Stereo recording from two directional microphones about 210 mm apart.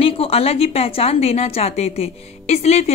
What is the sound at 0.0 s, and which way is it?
A woman's voice, 25° left (ahead or behind).